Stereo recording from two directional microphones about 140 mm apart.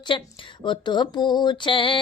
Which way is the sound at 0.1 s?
35° left (ahead or behind).